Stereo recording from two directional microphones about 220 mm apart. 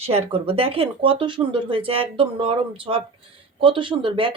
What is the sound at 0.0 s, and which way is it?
A woman's voice, 25° right (ahead or behind).